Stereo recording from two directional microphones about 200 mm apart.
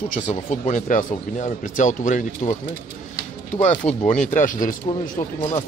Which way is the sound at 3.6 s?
35° left (ahead or behind).